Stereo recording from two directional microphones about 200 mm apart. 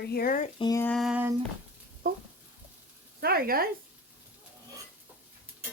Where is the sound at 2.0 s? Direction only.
45° right (ahead or behind).